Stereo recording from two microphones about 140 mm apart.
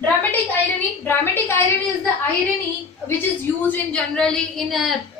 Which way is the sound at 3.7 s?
5° left (ahead or behind).